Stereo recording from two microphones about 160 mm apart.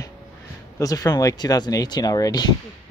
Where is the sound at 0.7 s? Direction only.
20° left (ahead or behind).